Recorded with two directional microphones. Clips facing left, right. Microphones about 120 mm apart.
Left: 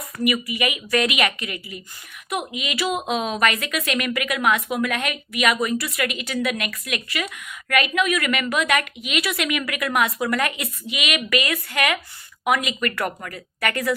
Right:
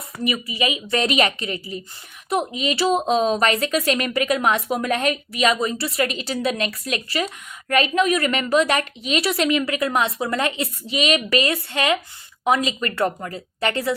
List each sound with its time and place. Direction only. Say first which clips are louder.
0.3 s a woman's voice: even; 30° right (ahead or behind)